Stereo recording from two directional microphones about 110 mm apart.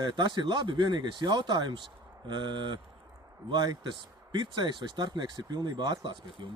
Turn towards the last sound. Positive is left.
turn(degrees=-40)  # may be behind; listen again after turning